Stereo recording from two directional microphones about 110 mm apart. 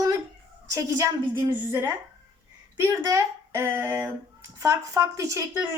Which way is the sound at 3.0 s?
30° right (ahead or behind).